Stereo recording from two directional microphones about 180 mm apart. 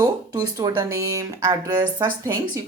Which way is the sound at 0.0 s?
20° right (ahead or behind).